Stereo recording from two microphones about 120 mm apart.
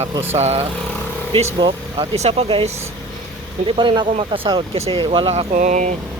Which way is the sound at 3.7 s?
45° right (ahead or behind).